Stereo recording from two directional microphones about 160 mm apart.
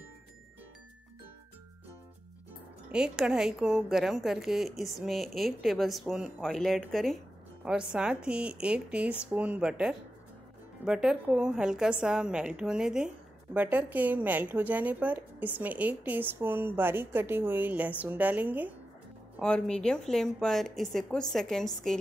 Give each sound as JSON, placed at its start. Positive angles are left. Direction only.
{"t": 2.9, "sound": "a woman's voice", "side_deg": -5}
{"t": 19.4, "sound": "a woman's voice", "side_deg": 5}